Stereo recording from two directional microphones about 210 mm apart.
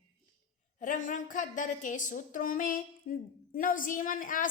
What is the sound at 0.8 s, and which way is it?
A woman's voice, 35° left (ahead or behind).